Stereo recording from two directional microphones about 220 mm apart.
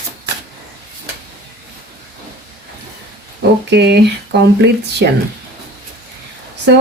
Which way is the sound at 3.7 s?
50° right (ahead or behind).